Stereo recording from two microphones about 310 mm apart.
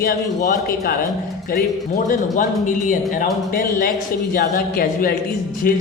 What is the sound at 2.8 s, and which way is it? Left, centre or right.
Music, left.